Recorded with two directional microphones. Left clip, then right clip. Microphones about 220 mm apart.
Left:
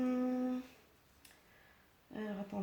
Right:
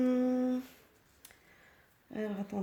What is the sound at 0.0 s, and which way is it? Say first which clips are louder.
Humming: right 6 dB; 45° right (ahead or behind).